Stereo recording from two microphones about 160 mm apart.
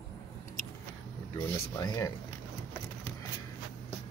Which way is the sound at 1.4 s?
25° left (ahead or behind).